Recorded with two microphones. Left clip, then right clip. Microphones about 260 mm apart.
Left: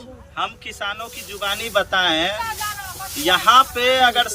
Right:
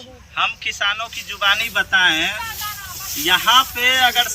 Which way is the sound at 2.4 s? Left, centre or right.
Centre.